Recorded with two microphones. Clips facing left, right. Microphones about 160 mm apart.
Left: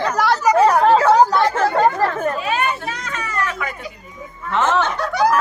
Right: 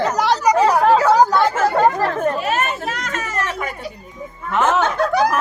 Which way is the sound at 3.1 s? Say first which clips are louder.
Left 3 dB; 45° right (ahead or behind).